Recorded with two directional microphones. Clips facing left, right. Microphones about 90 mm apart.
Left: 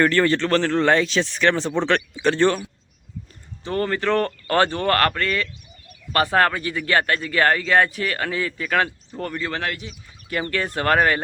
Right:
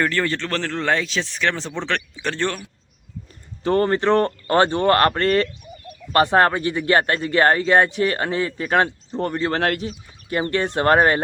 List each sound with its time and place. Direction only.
0.0 s speech: centre (ahead or behind)
3.6 s speech: 35° right (ahead or behind)
6.1 s speech: 25° right (ahead or behind); by 9.9 s 40° right (ahead or behind)
10.2 s speech: 25° right (ahead or behind)